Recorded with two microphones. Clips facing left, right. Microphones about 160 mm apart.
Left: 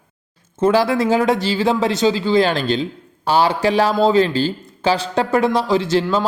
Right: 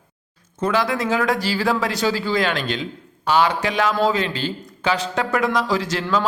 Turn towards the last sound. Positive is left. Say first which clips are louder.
# left 5 dB
turn(degrees=30)  # may be behind; listen again after turning